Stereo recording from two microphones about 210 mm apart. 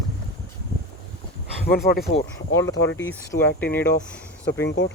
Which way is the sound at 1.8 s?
40° left (ahead or behind).